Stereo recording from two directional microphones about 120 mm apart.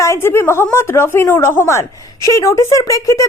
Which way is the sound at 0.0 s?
20° left (ahead or behind).